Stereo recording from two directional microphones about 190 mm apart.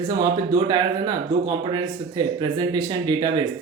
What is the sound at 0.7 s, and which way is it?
Speech, 20° right (ahead or behind).